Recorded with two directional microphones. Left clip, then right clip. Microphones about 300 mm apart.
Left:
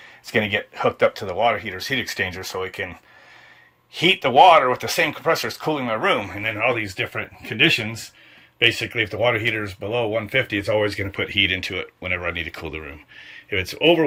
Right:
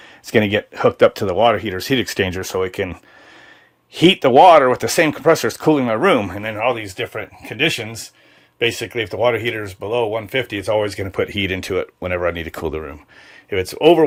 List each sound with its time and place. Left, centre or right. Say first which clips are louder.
0.3 s speech: right 5 dB; right
6.4 s speech: right 2 dB; centre